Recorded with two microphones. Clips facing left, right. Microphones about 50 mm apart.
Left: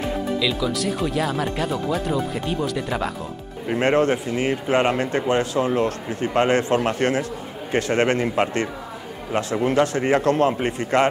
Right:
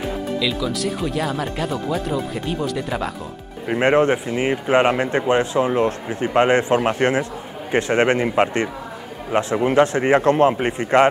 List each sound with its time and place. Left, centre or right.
0.4 s speech: centre
3.6 s a man's voice: centre